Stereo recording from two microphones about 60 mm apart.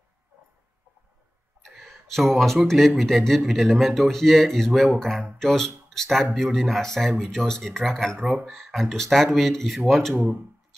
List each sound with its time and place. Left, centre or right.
1.6 s speech: centre
10.1 s speech: right